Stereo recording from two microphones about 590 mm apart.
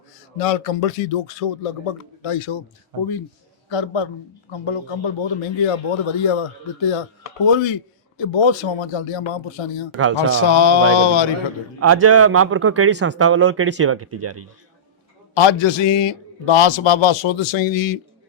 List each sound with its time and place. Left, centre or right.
0.3 s speech: left
2.9 s a man's voice: right
3.7 s a man's voice: left
10.0 s a man's voice: right
10.4 s a man's voice: left
11.8 s a man's voice: right
15.4 s a man's voice: left